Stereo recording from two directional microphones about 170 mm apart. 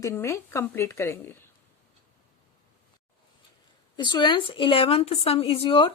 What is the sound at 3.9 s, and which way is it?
Speech, 25° left (ahead or behind).